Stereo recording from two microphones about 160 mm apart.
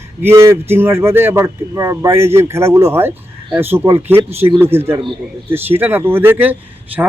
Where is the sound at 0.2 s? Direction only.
15° right (ahead or behind).